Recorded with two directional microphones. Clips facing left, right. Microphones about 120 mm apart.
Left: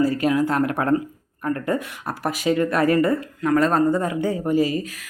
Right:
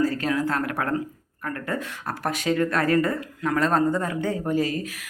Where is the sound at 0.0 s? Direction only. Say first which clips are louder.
Left 4 dB; 10° left (ahead or behind).